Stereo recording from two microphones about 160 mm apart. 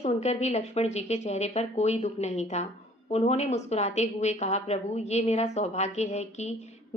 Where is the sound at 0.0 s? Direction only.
45° left (ahead or behind).